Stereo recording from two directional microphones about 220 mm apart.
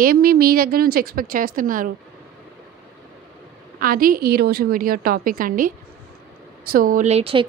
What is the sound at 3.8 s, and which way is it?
A woman's voice, 40° right (ahead or behind).